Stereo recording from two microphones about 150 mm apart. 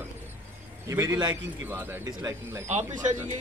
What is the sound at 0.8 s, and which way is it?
Speech, 20° right (ahead or behind).